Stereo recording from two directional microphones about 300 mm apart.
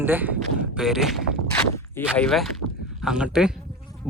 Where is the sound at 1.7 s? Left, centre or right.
Centre.